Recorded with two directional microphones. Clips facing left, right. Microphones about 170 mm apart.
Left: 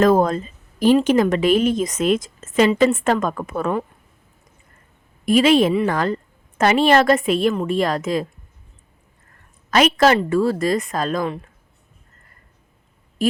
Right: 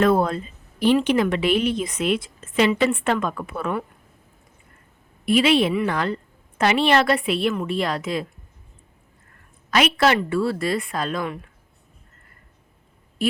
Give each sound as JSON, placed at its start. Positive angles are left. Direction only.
{"t": 0.0, "sound": "a woman's voice", "side_deg": 40}
{"t": 5.2, "sound": "a woman's voice", "side_deg": 45}
{"t": 9.6, "sound": "a woman's voice", "side_deg": 40}